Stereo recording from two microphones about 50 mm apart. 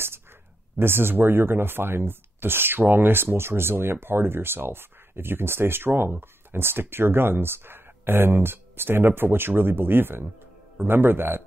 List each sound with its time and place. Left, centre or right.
0.7 s speech: right